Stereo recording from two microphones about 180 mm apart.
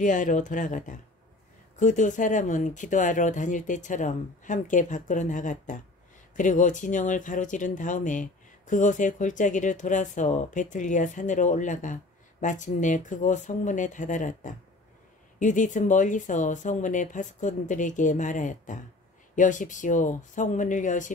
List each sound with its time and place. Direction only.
0.0 s speech: 45° left (ahead or behind)